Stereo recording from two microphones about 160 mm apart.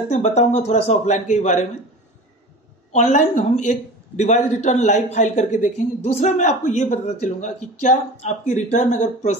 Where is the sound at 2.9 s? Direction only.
50° left (ahead or behind).